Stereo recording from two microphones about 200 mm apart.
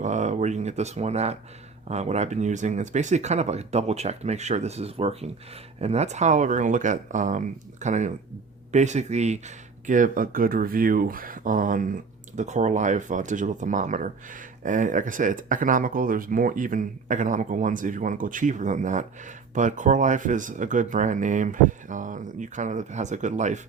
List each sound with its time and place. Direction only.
0.0 s speech: 35° right (ahead or behind)